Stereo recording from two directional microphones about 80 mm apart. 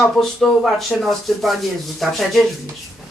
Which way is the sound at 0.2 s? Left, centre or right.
Centre.